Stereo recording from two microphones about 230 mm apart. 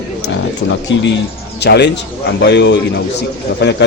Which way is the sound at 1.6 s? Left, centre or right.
Left.